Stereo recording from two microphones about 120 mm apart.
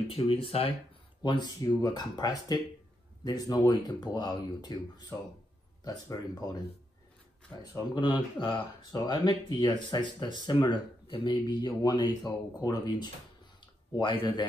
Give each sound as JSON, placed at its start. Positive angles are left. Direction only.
{"t": 0.1, "sound": "speech", "side_deg": 50}
{"t": 1.2, "sound": "speech", "side_deg": 35}
{"t": 7.5, "sound": "speech", "side_deg": 35}
{"t": 13.6, "sound": "a sound", "side_deg": 40}